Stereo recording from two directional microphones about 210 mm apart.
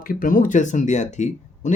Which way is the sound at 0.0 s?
40° left (ahead or behind).